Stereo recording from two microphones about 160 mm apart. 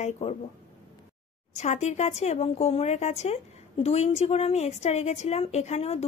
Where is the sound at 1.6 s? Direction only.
45° left (ahead or behind).